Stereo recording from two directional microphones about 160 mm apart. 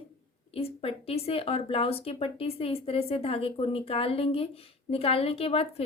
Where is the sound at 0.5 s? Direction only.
35° left (ahead or behind).